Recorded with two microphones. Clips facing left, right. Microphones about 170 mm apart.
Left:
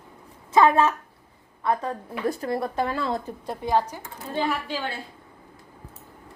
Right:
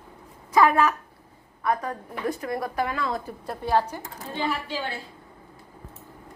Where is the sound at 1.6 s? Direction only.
25° left (ahead or behind).